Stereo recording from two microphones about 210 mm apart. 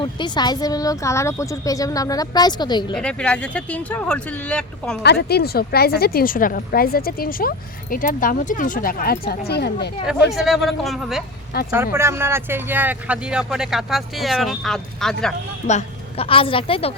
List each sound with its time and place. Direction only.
0.0 s speech: 20° left (ahead or behind)
2.9 s speech: 5° left (ahead or behind)
5.0 s a woman's voice: 50° left (ahead or behind)
10.3 s speech: centre (ahead or behind)
11.7 s speech: 10° right (ahead or behind)
15.6 s a woman's voice: 30° left (ahead or behind)